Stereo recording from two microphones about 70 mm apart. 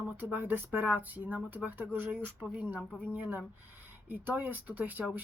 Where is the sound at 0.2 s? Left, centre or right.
Right.